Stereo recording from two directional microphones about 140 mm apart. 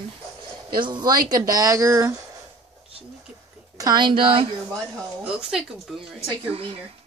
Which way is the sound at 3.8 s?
30° right (ahead or behind).